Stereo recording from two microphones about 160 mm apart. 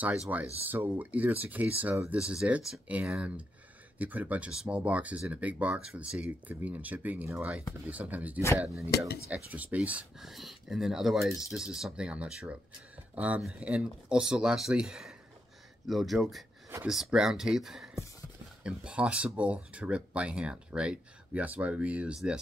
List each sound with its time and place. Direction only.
0.3 s speech: 15° right (ahead or behind)
8.9 s speech: 75° left (ahead or behind)
9.3 s speech: 10° right (ahead or behind)